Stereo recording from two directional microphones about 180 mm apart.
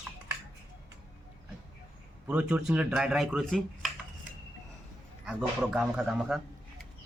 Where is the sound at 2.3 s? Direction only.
10° right (ahead or behind).